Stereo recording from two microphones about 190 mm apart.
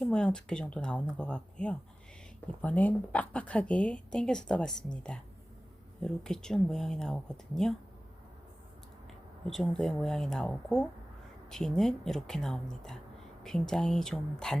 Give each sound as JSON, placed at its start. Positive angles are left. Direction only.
{"t": 0.0, "sound": "speech", "side_deg": 5}
{"t": 6.0, "sound": "speech", "side_deg": 5}
{"t": 9.5, "sound": "speech", "side_deg": 0}